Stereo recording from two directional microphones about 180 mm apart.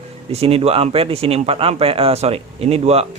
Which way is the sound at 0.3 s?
35° right (ahead or behind).